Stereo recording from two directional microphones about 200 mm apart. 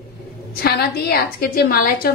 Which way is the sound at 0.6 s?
50° left (ahead or behind).